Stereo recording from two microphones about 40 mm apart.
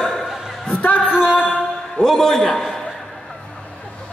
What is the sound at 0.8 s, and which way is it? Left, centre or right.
Music, left.